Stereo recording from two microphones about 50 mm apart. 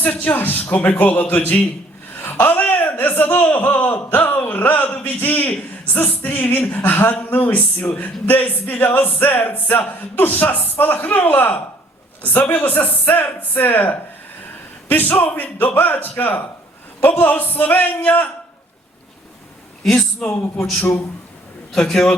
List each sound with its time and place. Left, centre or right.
0.0 s a man's voice: left
2.1 s a sound: left
3.8 s a man's voice: left
19.9 s speech: centre